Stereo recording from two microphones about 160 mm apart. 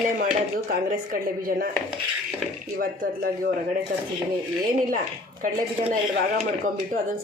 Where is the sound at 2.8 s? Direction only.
65° right (ahead or behind).